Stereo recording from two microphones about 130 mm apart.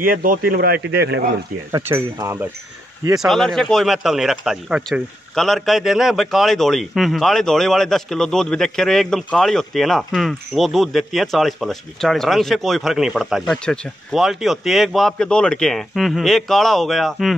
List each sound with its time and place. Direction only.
0.0 s speech: 90° right
1.7 s speech: 20° right (ahead or behind)
3.2 s a man's voice: centre (ahead or behind)